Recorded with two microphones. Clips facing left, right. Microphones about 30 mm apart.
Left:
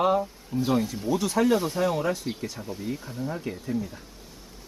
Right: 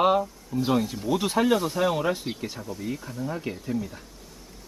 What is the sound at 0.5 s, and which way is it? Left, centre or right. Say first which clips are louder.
Speech: even; left.